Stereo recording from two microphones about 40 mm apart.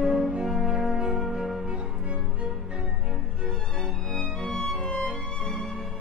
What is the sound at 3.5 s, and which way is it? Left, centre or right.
Music, centre.